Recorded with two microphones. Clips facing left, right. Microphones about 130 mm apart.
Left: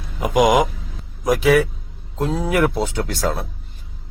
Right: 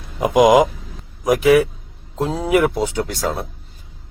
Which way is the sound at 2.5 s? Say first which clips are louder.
Right 4 dB; 10° right (ahead or behind).